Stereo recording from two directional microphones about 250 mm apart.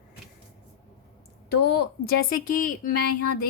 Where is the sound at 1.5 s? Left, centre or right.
Left.